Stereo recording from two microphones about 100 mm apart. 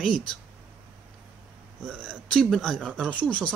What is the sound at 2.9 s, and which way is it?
Speech, 10° right (ahead or behind).